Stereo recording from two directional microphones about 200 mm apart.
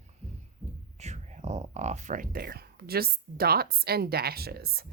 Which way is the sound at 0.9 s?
35° right (ahead or behind).